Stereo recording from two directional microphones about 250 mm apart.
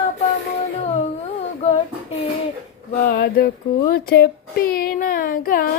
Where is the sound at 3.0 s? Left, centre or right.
Left.